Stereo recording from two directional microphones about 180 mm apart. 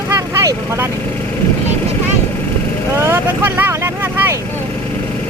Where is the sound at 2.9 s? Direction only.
15° right (ahead or behind).